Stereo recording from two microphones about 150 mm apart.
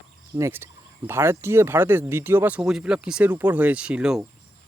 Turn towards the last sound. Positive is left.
turn(degrees=-5)  # may be behind; listen again after turning